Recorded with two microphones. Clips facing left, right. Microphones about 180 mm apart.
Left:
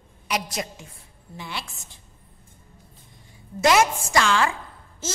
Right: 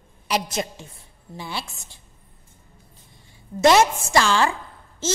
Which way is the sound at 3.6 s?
25° right (ahead or behind).